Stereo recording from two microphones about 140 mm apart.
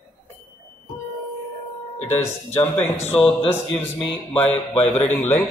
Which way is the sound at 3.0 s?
45° left (ahead or behind).